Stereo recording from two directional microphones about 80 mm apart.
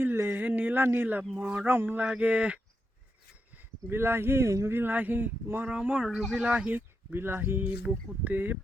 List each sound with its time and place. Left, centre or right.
0.0 s a sound: right
1.4 s speech: right
2.0 s speech: centre; by 4.7 s right
4.7 s speech: right
5.6 s speech: centre
6.7 s speech: right